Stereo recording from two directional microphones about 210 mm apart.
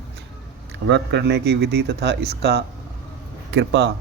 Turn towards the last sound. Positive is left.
turn(degrees=-55)  # may be behind; listen again after turning